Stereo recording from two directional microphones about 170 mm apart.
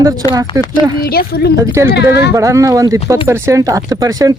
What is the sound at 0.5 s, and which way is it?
Speech, 20° right (ahead or behind).